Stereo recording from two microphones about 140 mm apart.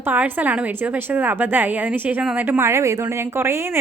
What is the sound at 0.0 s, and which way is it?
Speech, 15° right (ahead or behind).